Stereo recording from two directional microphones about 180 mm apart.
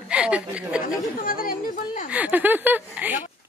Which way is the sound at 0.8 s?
50° left (ahead or behind).